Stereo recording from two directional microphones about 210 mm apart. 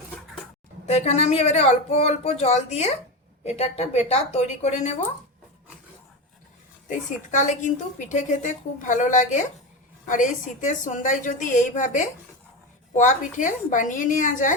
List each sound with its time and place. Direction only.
0.9 s a woman's voice: 30° left (ahead or behind)
6.8 s a woman's voice: 35° left (ahead or behind)